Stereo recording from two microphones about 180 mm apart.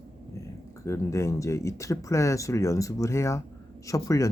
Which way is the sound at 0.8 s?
15° left (ahead or behind).